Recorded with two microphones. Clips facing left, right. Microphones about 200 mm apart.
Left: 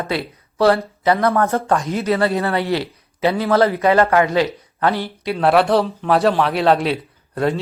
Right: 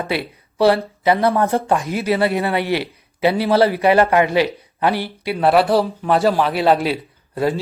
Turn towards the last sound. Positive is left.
turn(degrees=-5)  # may be behind; listen again after turning